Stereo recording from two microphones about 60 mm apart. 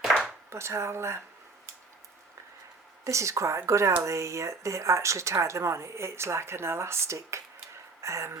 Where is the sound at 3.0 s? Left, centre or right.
Right.